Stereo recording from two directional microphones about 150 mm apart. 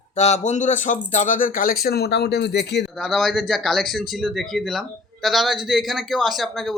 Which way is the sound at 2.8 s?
Centre (ahead or behind).